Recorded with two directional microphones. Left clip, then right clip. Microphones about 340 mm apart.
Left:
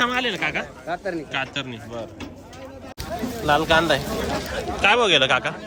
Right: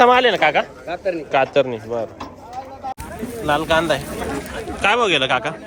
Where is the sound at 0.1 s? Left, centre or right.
Centre.